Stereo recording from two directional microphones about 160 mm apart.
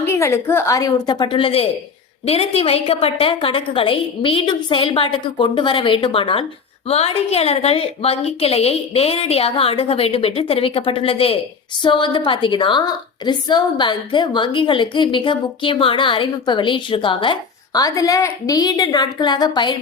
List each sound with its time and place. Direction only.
0.0 s a woman's voice: 15° left (ahead or behind)